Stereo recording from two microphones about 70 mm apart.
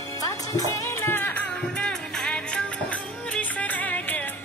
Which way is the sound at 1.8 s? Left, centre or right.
Centre.